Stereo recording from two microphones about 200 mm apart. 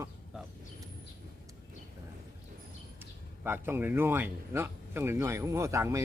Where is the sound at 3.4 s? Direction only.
10° right (ahead or behind).